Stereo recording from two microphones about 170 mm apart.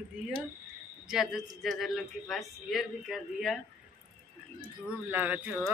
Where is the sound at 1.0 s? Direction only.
Centre (ahead or behind).